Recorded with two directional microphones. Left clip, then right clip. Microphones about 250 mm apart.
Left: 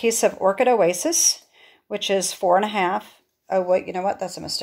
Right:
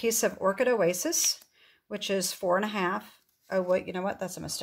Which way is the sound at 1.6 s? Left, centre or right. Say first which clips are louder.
Left 9 dB; right.